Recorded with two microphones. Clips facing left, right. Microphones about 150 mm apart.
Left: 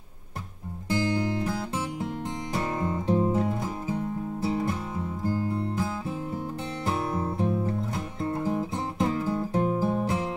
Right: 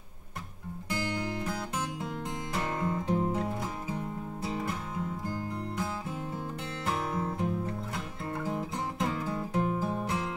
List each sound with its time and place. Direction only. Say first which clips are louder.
0.8 s music: left 7 dB; 30° left (ahead or behind)
2.5 s music: left 3 dB; 30° left (ahead or behind)